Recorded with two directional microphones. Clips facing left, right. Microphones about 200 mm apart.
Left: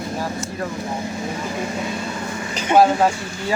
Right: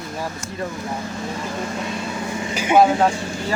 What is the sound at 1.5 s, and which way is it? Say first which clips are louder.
Speech: left 1 dB; 5° left (ahead or behind).